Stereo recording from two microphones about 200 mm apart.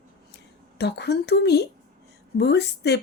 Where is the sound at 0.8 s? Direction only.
55° left (ahead or behind).